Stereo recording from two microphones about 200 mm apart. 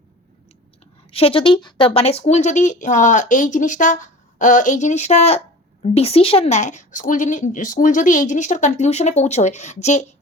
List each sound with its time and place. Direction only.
1.1 s a woman's voice: 30° left (ahead or behind)